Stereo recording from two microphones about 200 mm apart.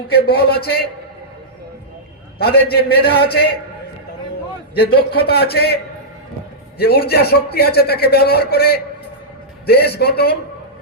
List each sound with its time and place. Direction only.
0.3 s a man's voice: 50° left (ahead or behind)
2.4 s a man's voice: 50° left (ahead or behind)
4.7 s a man's voice: 50° left (ahead or behind)